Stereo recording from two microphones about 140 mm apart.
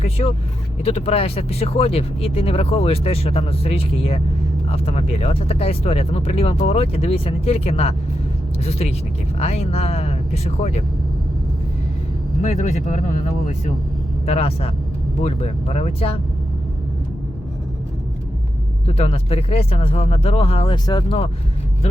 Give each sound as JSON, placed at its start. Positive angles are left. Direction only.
{"t": 0.0, "sound": "speech", "side_deg": 50}
{"t": 12.4, "sound": "speech", "side_deg": 60}
{"t": 14.3, "sound": "speech", "side_deg": 45}
{"t": 18.9, "sound": "speech", "side_deg": 45}